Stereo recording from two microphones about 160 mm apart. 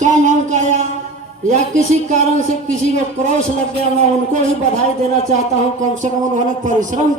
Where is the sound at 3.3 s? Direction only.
50° right (ahead or behind).